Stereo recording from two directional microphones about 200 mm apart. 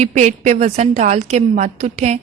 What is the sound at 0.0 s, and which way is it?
A woman's voice, 35° right (ahead or behind).